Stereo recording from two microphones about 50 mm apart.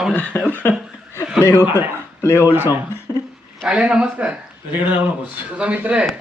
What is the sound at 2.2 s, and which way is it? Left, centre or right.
Speech, left.